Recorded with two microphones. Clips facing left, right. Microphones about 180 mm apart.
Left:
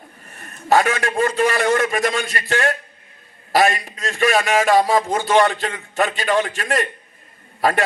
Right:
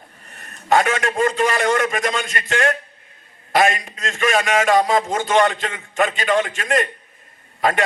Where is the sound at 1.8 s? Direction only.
40° left (ahead or behind).